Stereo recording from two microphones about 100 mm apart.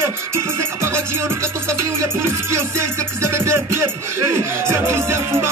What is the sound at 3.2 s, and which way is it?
Music, 25° right (ahead or behind).